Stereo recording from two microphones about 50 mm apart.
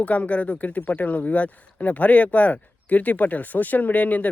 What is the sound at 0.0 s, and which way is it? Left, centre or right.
Speech, left.